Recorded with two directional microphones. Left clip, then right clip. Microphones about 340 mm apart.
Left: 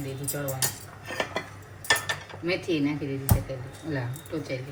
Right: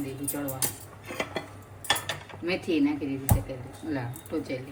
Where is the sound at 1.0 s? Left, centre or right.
Centre.